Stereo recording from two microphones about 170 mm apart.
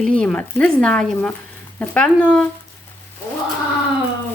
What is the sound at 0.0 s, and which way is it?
A woman's voice, 5° left (ahead or behind).